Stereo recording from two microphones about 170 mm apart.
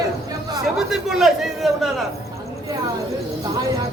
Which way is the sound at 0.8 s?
Centre (ahead or behind).